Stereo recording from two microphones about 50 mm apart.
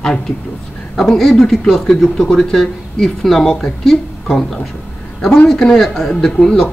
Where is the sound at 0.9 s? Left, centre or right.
Centre.